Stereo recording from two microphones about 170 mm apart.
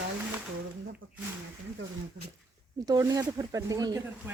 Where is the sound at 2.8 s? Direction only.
20° right (ahead or behind).